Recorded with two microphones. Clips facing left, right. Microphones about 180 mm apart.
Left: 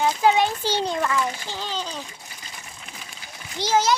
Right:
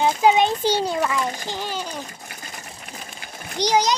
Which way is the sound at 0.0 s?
20° right (ahead or behind).